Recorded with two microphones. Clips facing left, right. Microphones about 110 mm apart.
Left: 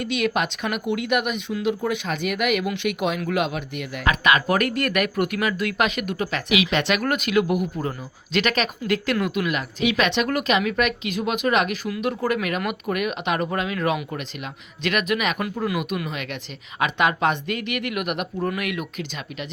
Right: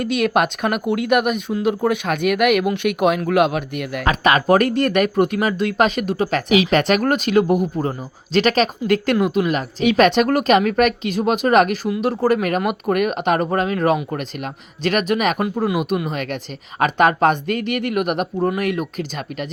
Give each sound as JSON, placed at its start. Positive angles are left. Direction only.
{"t": 0.0, "sound": "speech", "side_deg": -45}
{"t": 4.0, "sound": "speech", "side_deg": -35}